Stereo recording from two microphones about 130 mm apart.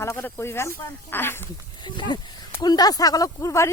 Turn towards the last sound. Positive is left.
turn(degrees=25)  # may be behind; listen again after turning